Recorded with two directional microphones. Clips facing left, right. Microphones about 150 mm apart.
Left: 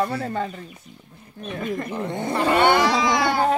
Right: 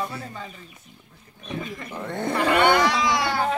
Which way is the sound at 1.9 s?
15° left (ahead or behind).